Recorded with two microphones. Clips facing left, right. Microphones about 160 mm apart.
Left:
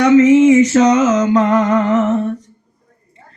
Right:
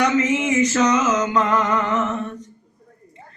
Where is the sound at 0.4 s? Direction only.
30° left (ahead or behind).